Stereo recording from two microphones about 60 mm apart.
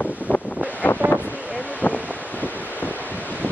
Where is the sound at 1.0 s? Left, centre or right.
Right.